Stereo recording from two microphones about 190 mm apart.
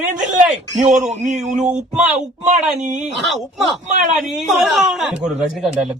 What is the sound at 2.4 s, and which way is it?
Speech, 40° right (ahead or behind).